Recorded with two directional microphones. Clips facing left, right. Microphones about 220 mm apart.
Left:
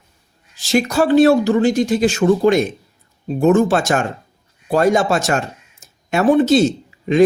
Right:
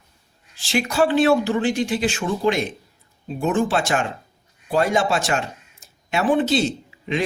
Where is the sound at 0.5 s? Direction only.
45° left (ahead or behind).